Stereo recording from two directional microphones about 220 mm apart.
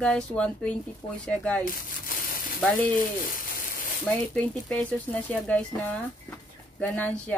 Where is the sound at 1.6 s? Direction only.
40° left (ahead or behind).